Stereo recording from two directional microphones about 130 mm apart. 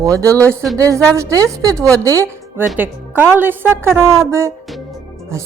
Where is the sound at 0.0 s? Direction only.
25° right (ahead or behind).